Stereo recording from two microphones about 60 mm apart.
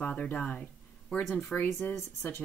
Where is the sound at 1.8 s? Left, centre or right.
Left.